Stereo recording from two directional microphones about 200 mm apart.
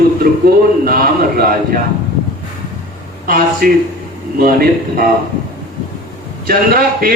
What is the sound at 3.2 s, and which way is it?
A man's voice, 45° right (ahead or behind).